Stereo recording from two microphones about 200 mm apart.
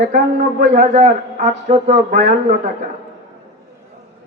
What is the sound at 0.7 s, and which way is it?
A man's voice, 40° right (ahead or behind).